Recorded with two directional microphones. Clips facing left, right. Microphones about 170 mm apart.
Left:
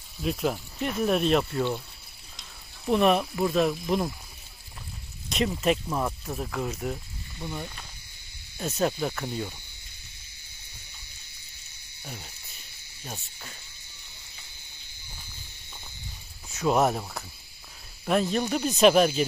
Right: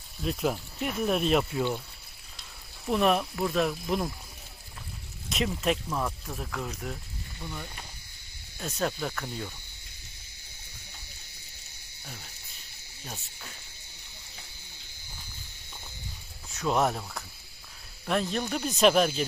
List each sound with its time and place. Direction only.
0.2 s speech: centre (ahead or behind)
2.9 s speech: centre (ahead or behind)
5.3 s speech: centre (ahead or behind)
5.9 s speech: 15° left (ahead or behind)
7.4 s speech: 20° left (ahead or behind)
16.6 s speech: 5° left (ahead or behind)
18.0 s speech: 5° left (ahead or behind)